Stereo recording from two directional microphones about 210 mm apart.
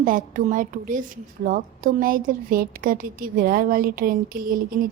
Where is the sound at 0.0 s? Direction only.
40° right (ahead or behind).